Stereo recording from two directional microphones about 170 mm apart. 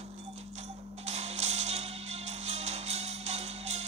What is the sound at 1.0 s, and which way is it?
Music, 40° right (ahead or behind).